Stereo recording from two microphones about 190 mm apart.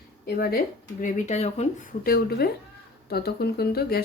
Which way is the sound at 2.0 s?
55° left (ahead or behind).